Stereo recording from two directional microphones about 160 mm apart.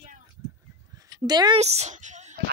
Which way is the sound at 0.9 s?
25° right (ahead or behind).